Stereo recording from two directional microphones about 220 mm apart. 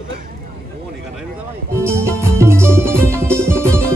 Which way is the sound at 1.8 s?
10° right (ahead or behind).